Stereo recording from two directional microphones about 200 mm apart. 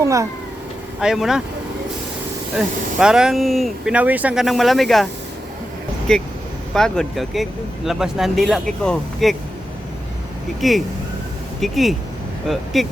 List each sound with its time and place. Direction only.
0.0 s speech: 15° right (ahead or behind)
0.9 s speech: centre (ahead or behind)
2.6 s speech: 5° right (ahead or behind)
6.1 s speech: 5° left (ahead or behind)
10.6 s speech: centre (ahead or behind)